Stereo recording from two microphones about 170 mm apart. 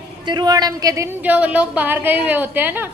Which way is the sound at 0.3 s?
25° right (ahead or behind).